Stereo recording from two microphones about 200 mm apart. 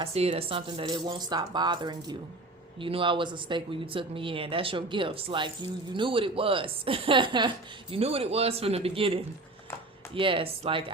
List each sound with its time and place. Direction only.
0.0 s speech: 30° right (ahead or behind)
10.2 s speech: 25° right (ahead or behind)